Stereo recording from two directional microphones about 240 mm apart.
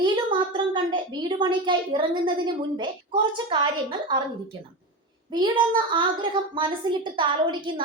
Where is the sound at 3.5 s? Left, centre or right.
Centre.